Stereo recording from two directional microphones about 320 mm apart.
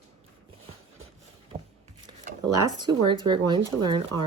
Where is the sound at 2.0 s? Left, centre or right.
Right.